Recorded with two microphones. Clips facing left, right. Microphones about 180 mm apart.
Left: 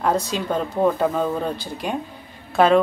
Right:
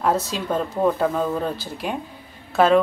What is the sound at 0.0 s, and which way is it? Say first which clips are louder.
Speech: even; 5° right (ahead or behind).